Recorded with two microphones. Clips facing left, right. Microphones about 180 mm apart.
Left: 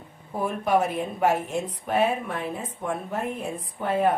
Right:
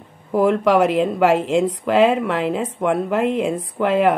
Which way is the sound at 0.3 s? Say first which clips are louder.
Right 8 dB; 90° right.